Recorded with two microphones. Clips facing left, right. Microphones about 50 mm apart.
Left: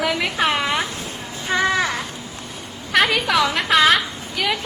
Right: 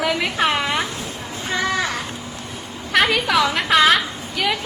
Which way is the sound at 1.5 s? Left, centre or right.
Left.